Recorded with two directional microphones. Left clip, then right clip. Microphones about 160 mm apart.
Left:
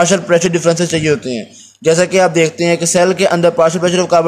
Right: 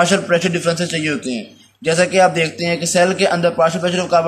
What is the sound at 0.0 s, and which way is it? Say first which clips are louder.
A man's voice: left 3 dB; 40° left (ahead or behind).